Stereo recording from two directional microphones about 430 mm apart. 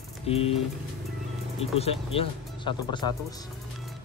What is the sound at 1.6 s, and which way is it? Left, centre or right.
Speech, centre.